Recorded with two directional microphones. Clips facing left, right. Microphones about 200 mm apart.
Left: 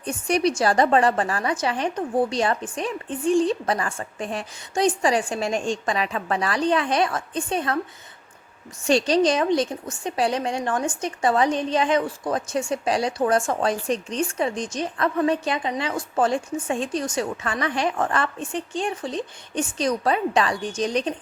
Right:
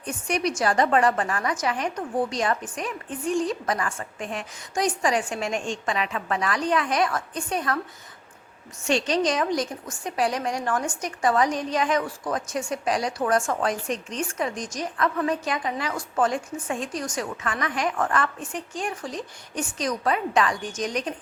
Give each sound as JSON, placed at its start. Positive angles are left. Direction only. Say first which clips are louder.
{"t": 0.0, "sound": "a woman's voice", "louder": "left 5 dB", "side_deg": 30}
{"t": 8.9, "sound": "a woman's voice", "louder": "left 4 dB", "side_deg": 35}